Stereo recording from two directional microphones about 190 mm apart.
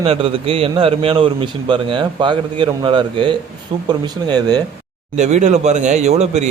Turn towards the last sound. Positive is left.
turn(degrees=-35)  # may be behind; listen again after turning